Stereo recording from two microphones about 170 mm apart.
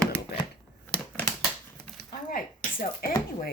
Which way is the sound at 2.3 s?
55° left (ahead or behind).